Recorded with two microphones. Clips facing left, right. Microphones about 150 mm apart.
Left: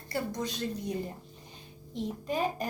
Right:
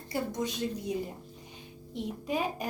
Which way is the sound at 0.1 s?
15° right (ahead or behind).